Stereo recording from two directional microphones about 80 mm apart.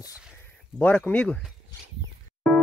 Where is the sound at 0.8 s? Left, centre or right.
Centre.